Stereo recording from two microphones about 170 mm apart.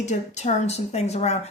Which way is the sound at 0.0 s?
45° left (ahead or behind).